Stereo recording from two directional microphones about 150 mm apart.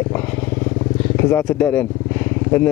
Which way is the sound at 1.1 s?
10° left (ahead or behind).